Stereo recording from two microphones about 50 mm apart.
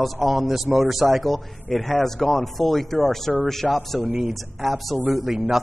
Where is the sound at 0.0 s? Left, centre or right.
Centre.